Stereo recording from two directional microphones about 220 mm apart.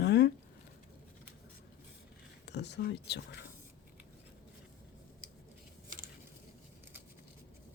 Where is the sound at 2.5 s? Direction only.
50° left (ahead or behind).